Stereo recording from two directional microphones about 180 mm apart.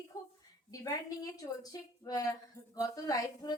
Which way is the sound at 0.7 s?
20° left (ahead or behind).